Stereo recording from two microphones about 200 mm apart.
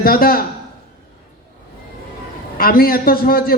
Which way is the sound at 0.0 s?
50° left (ahead or behind).